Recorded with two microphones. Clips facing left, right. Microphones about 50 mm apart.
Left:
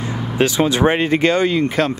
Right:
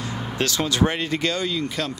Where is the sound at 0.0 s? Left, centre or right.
Left.